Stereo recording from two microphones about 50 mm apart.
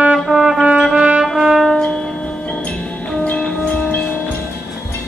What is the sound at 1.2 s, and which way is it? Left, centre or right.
Music, centre.